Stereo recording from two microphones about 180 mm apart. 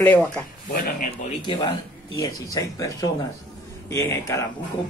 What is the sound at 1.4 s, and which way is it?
A man's voice, 25° left (ahead or behind).